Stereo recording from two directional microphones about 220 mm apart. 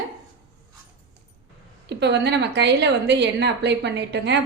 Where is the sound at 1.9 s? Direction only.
50° right (ahead or behind).